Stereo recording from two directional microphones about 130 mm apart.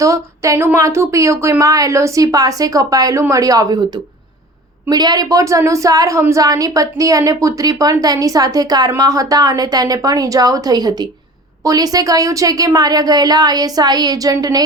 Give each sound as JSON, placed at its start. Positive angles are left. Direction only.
{"t": 0.0, "sound": "a woman's voice", "side_deg": -25}